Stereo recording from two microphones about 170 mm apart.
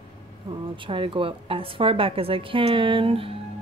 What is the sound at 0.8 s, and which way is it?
A woman's voice, 30° right (ahead or behind).